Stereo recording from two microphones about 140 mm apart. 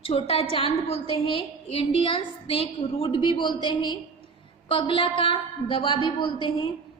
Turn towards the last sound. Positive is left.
turn(degrees=35)  # may be behind; listen again after turning